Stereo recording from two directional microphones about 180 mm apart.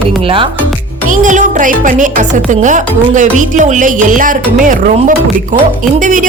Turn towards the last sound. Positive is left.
turn(degrees=-45)  # may be behind; listen again after turning